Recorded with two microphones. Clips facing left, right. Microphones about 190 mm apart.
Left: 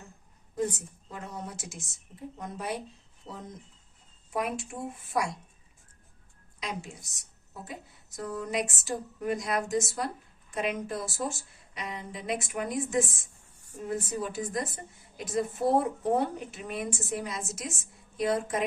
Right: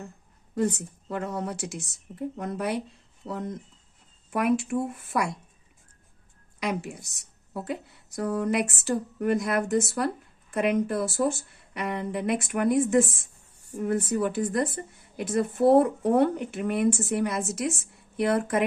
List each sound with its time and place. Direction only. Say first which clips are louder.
0.5 s a woman's voice: right 5 dB; 70° right (ahead or behind)
6.6 s a woman's voice: right 8 dB; 65° right (ahead or behind)